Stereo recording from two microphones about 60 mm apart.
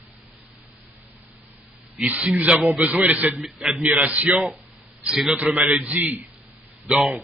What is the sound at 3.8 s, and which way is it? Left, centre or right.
Speech, right.